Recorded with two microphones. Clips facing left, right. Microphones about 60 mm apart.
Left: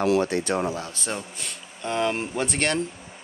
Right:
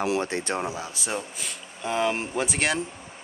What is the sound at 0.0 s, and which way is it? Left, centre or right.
Speech, right.